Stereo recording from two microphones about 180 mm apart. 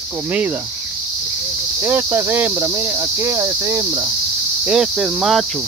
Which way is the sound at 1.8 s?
15° right (ahead or behind).